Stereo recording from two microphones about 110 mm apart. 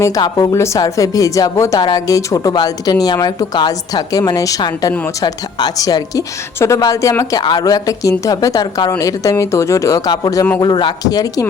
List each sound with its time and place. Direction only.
0.0 s speech: 35° left (ahead or behind)
10.6 s speech: 45° left (ahead or behind)